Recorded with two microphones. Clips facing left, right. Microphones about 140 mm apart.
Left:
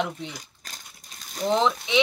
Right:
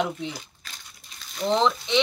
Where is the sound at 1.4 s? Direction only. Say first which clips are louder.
Even; 5° left (ahead or behind).